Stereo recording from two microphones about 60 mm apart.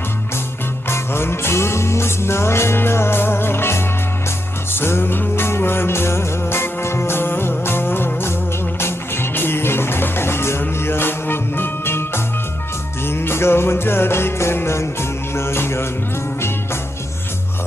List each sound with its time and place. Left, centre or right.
0.8 s music: left
13.0 s music: left